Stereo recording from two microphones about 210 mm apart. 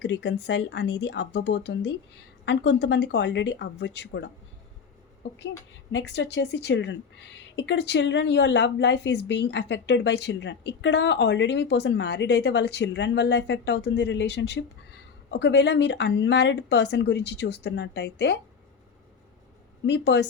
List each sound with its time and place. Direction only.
0.0 s speech: 55° left (ahead or behind)
19.8 s speech: 55° left (ahead or behind)